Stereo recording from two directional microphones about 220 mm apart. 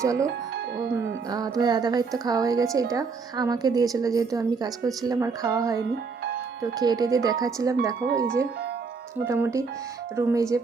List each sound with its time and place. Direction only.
0.0 s a woman's voice: 15° right (ahead or behind)
1.3 s a woman's voice: 15° right (ahead or behind)
9.2 s a woman's voice: 10° right (ahead or behind)